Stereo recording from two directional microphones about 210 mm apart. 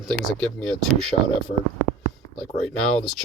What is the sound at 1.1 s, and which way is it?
Speech, 35° left (ahead or behind).